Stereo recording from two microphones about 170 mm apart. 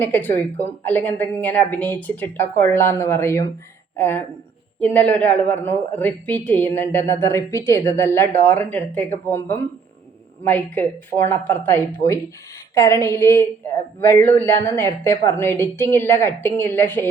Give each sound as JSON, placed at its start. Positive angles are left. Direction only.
{"t": 0.0, "sound": "a woman's voice", "side_deg": 10}